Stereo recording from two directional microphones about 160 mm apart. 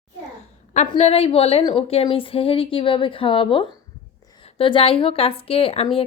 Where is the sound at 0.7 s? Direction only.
45° left (ahead or behind).